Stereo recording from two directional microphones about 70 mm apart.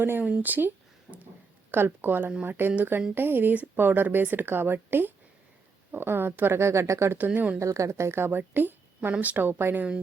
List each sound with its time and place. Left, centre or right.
0.0 s speech: right
1.7 s speech: right
7.3 s speech: centre
7.6 s speech: right